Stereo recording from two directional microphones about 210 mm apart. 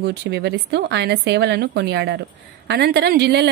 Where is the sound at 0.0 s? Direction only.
50° right (ahead or behind).